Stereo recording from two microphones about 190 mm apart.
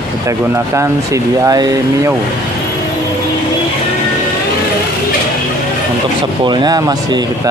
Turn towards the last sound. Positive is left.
turn(degrees=-20)  # may be behind; listen again after turning